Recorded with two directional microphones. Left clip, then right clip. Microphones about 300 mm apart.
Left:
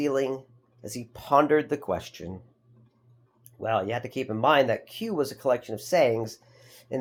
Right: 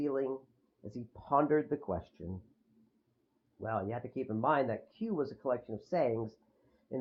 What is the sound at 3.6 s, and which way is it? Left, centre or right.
Speech, centre.